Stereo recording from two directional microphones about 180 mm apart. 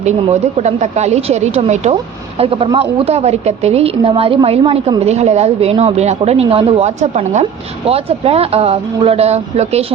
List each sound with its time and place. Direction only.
0.0 s a woman's voice: 40° right (ahead or behind)